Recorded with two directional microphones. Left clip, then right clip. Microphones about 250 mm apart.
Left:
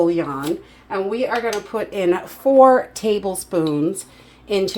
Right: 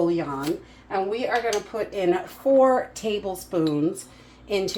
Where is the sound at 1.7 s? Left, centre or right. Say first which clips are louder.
Left 4 dB; left.